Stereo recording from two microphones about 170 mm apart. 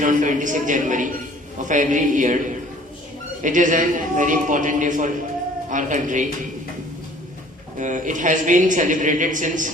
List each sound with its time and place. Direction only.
0.0 s a man's voice: 50° right (ahead or behind)
3.4 s a man's voice: 50° right (ahead or behind)
7.8 s a man's voice: 50° right (ahead or behind)